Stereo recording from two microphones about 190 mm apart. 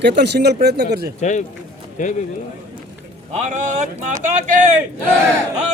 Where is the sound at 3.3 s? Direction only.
40° right (ahead or behind).